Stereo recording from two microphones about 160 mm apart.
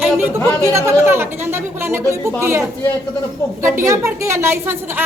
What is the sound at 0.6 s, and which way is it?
A woman's voice, 20° right (ahead or behind).